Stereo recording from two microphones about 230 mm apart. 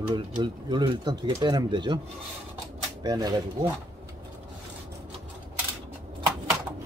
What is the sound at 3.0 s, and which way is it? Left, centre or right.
Speech, centre.